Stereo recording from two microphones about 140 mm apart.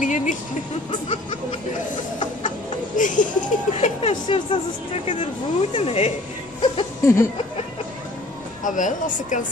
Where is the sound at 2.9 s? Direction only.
65° left (ahead or behind).